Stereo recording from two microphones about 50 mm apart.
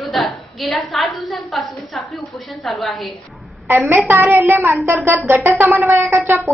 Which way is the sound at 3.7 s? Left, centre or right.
Right.